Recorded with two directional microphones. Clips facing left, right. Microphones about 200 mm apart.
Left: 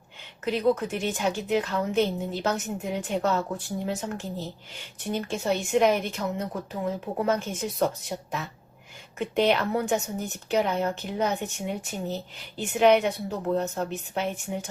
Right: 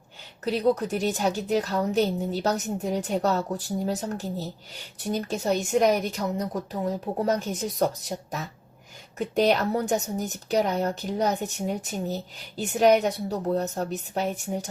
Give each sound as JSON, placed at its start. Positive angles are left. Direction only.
{"t": 0.4, "sound": "a woman's voice", "side_deg": -35}